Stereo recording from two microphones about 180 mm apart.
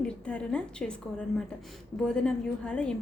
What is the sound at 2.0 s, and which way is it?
Speech, 5° left (ahead or behind).